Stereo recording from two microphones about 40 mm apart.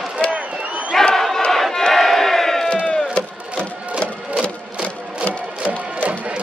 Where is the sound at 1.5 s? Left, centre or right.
Centre.